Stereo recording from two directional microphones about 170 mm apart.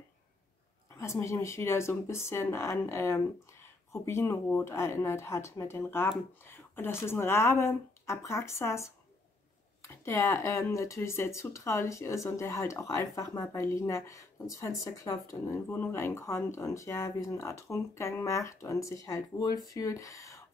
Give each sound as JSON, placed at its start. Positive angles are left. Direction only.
{"t": 0.9, "sound": "speech", "side_deg": 15}